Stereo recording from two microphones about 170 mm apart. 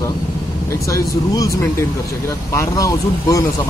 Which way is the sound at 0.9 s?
20° left (ahead or behind).